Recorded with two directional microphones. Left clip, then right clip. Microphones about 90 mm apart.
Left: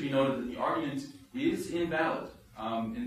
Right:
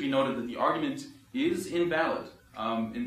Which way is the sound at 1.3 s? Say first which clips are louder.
Right 2 dB; 35° right (ahead or behind).